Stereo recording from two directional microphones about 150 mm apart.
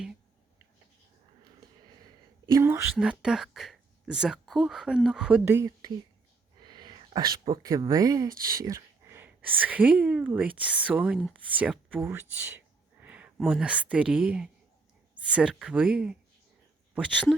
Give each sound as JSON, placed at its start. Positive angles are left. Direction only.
{"t": 2.5, "sound": "speech", "side_deg": -20}
{"t": 2.9, "sound": "speech", "side_deg": -5}
{"t": 5.5, "sound": "speech", "side_deg": -20}
{"t": 6.6, "sound": "speech", "side_deg": -30}